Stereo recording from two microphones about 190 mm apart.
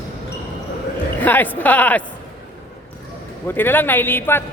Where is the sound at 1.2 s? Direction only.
10° left (ahead or behind).